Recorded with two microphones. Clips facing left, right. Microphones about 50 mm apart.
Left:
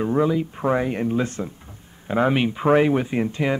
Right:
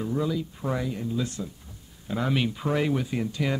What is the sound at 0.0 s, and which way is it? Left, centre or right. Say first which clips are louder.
Speech: left 7 dB; left.